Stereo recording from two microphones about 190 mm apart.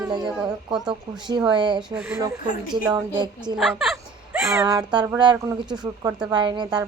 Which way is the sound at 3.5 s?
Centre (ahead or behind).